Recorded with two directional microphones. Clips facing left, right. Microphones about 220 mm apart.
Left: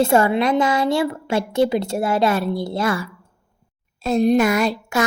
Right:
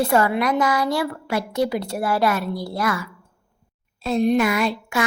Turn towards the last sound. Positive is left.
turn(degrees=40)  # may be behind; listen again after turning